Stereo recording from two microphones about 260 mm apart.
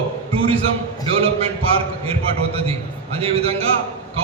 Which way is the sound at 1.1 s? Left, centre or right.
Right.